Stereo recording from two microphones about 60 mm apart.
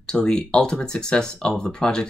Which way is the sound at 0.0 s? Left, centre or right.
Centre.